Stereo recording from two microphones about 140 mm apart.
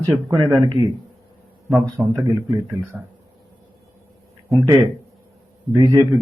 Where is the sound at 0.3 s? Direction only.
25° right (ahead or behind).